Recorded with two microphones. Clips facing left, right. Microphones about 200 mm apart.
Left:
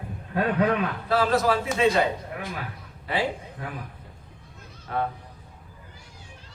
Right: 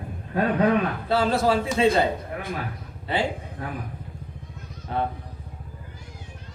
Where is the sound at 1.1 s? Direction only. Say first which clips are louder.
Even; 30° right (ahead or behind).